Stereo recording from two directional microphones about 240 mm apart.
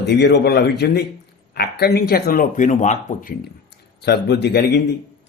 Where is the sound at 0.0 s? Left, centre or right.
Left.